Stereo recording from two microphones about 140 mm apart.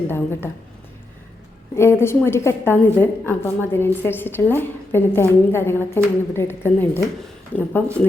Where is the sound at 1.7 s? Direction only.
20° left (ahead or behind).